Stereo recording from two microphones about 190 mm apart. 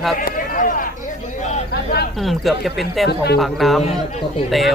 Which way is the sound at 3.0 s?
60° left (ahead or behind).